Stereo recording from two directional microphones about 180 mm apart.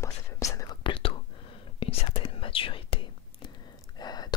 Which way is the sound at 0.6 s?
25° left (ahead or behind).